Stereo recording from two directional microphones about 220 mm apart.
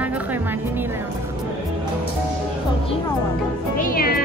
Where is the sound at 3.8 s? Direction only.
40° left (ahead or behind).